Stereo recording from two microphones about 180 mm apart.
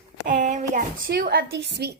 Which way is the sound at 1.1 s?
60° right (ahead or behind).